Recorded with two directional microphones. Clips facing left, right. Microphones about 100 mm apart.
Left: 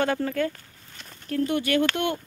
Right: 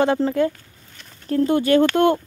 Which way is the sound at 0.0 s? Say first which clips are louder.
Right 6 dB; 25° right (ahead or behind).